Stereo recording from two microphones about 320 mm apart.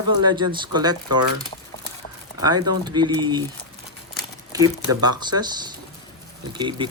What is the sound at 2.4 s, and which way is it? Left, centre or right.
Speech, centre.